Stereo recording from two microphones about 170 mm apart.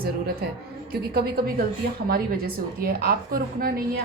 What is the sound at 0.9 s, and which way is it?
A woman's voice, 65° right (ahead or behind).